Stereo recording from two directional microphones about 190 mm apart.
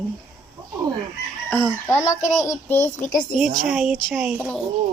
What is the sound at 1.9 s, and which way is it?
A woman's voice, 15° left (ahead or behind).